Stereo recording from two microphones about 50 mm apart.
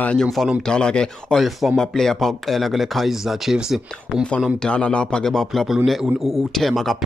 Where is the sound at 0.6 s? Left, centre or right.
Centre.